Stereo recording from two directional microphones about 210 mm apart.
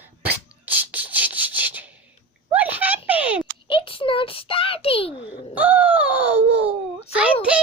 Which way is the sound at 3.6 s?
25° left (ahead or behind).